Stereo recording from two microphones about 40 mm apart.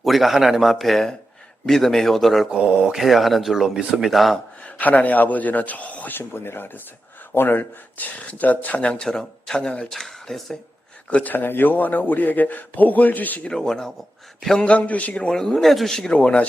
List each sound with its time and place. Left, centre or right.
0.0 s speech: centre
4.6 s a man's voice: left
6.1 s speech: left
8.3 s speech: left
9.0 s speech: centre
9.9 s speech: centre
11.1 s a man's voice: left
11.4 s a man's voice: left
13.5 s speech: centre
14.8 s speech: left
15.1 s speech: left
15.4 s speech: centre
16.1 s speech: left